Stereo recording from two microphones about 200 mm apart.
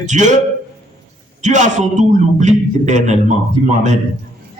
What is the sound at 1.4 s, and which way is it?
A man's voice, 35° right (ahead or behind).